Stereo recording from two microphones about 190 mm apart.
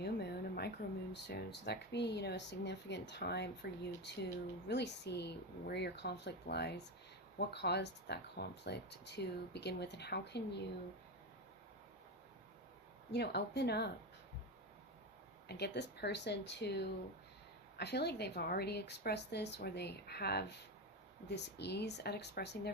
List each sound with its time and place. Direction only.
0.0 s a sound: 60° left (ahead or behind)
1.1 s speech: 60° left (ahead or behind)
13.1 s speech: 60° left (ahead or behind)
15.4 s speech: 60° left (ahead or behind)